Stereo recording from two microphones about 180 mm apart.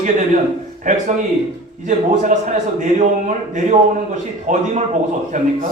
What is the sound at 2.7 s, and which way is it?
A man's voice, 45° right (ahead or behind).